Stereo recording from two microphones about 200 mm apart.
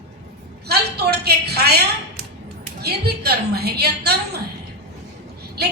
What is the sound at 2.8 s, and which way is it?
A woman's voice, 55° right (ahead or behind).